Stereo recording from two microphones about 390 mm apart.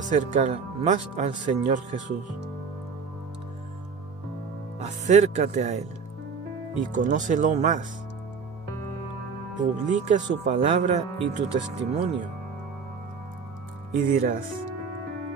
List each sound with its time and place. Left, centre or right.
0.1 s speech: centre
4.7 s speech: centre
9.6 s speech: centre
14.0 s speech: right